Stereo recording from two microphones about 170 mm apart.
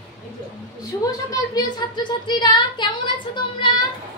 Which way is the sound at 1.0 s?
20° left (ahead or behind).